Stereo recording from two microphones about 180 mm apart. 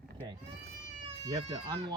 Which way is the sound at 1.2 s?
25° right (ahead or behind).